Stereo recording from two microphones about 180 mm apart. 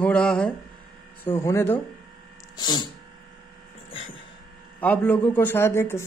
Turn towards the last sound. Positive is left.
turn(degrees=15)  # may be behind; listen again after turning